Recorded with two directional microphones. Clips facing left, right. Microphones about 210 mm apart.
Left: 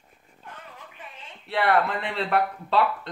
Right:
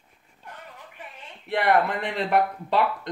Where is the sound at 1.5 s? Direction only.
15° right (ahead or behind).